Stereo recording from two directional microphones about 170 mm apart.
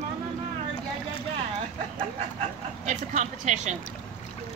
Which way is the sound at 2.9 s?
45° right (ahead or behind).